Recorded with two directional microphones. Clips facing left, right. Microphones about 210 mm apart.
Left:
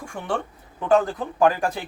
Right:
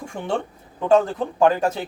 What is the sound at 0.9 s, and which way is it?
Speech, 25° right (ahead or behind).